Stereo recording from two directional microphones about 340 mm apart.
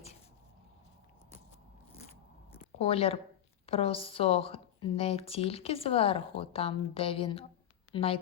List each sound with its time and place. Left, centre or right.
2.7 s a woman's voice: centre